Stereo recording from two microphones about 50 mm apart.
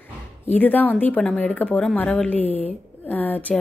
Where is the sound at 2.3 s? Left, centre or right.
Left.